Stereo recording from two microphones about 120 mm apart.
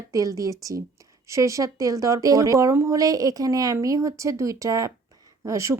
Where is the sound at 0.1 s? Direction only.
30° right (ahead or behind).